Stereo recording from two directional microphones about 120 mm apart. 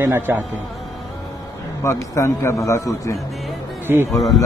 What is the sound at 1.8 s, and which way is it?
A man's voice, 25° left (ahead or behind).